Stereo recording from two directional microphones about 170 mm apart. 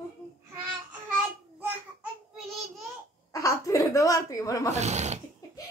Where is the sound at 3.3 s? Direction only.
20° left (ahead or behind).